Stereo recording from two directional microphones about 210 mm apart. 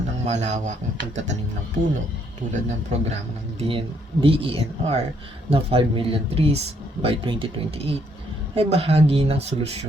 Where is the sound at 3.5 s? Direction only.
25° right (ahead or behind).